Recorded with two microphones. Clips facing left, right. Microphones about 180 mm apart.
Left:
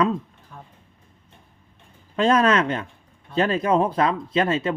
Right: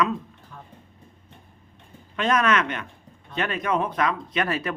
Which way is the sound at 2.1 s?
30° left (ahead or behind).